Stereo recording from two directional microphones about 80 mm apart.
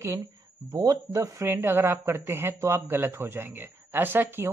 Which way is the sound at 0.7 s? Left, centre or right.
Right.